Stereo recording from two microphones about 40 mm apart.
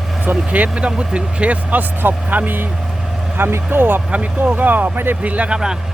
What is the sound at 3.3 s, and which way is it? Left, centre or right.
Speech, right.